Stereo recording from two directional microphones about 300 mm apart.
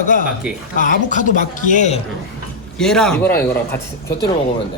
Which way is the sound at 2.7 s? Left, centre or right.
Centre.